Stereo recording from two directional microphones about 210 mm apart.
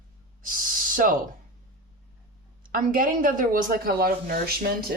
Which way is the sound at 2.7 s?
40° right (ahead or behind).